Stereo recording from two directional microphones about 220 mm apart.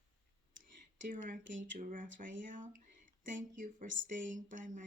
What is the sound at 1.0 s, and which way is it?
Speech, 35° right (ahead or behind).